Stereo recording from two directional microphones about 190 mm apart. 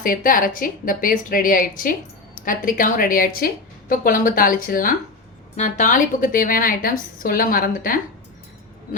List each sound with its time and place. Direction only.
0.0 s a woman's voice: 45° left (ahead or behind)